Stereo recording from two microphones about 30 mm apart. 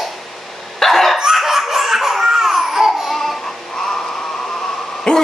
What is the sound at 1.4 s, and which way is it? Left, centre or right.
Laughter, centre.